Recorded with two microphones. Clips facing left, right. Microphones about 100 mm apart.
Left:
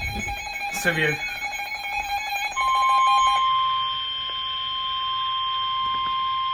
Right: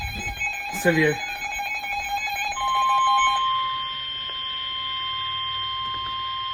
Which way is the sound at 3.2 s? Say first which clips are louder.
Left 2 dB; 35° left (ahead or behind).